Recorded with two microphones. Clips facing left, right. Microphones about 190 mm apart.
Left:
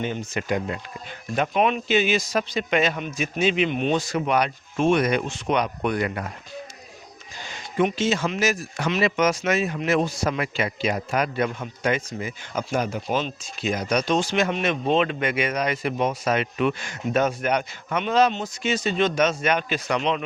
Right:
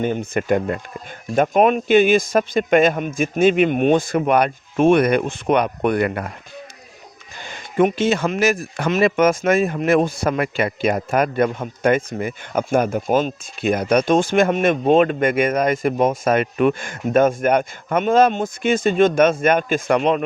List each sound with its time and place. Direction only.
0.0 s a man's voice: 50° right (ahead or behind)
7.3 s a man's voice: 55° right (ahead or behind)